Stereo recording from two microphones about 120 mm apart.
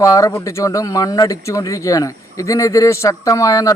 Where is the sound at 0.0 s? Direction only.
30° left (ahead or behind).